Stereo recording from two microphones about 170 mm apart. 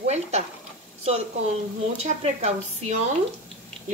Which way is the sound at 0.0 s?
40° right (ahead or behind).